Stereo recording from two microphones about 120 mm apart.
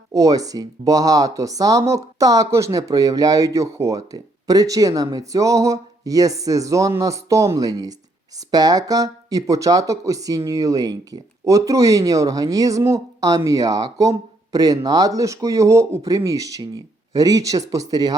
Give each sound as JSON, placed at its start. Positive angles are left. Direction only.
{"t": 0.1, "sound": "speech", "side_deg": -30}